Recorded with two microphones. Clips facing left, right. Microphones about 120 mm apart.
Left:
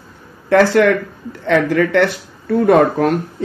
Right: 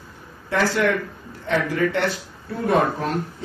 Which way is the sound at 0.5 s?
65° left (ahead or behind).